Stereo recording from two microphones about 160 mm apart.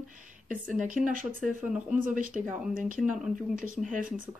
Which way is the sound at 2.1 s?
60° right (ahead or behind).